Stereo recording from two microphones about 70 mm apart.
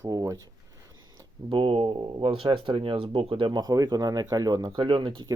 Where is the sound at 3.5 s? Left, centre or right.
Right.